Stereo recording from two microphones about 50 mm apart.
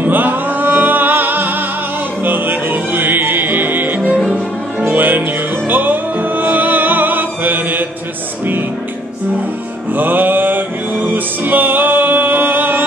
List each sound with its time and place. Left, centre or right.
0.0 s music: right
9.9 s music: right